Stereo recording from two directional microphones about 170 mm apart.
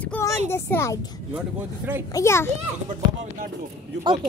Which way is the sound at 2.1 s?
15° left (ahead or behind).